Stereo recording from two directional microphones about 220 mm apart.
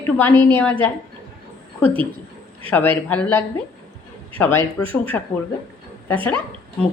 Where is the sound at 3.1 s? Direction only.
10° left (ahead or behind).